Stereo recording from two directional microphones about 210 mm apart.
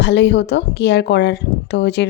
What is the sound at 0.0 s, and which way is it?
A woman's voice, 55° left (ahead or behind).